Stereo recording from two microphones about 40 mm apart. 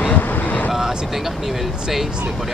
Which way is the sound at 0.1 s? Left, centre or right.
Left.